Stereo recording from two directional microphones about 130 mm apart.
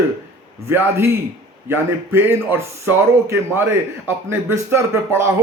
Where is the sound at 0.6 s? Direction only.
20° right (ahead or behind).